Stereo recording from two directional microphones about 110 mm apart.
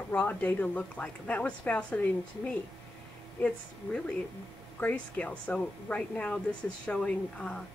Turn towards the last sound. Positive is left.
turn(degrees=10)  # may be behind; listen again after turning